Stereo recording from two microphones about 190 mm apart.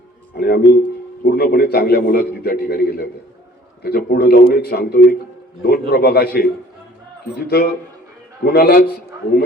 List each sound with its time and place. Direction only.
0.3 s a man's voice: 55° left (ahead or behind)